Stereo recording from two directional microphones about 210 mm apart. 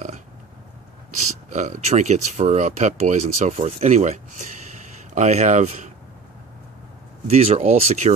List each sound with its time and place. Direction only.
1.5 s speech: 35° right (ahead or behind)
7.2 s speech: 30° right (ahead or behind)